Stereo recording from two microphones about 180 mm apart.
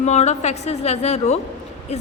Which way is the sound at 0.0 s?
40° left (ahead or behind).